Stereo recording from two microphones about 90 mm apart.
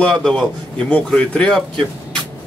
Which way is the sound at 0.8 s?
15° left (ahead or behind).